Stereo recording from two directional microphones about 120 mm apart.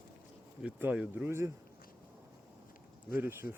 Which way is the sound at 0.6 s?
10° right (ahead or behind).